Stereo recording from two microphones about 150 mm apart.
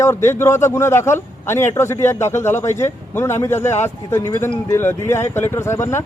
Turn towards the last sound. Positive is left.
turn(degrees=20)  # may be behind; listen again after turning